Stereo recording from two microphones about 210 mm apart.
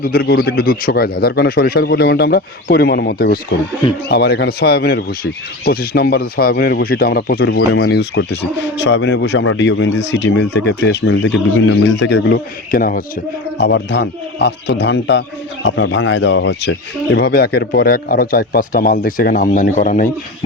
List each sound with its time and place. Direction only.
0.0 s speech: 50° left (ahead or behind)
13.6 s speech: 55° left (ahead or behind); by 20.1 s 40° left (ahead or behind)